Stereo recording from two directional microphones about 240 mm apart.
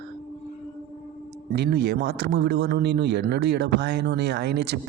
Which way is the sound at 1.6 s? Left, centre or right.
Right.